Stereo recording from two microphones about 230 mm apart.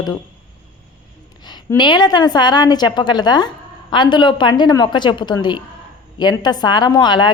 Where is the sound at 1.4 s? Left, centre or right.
Centre.